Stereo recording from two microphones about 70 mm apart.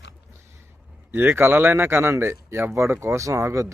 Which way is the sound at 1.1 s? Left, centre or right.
Right.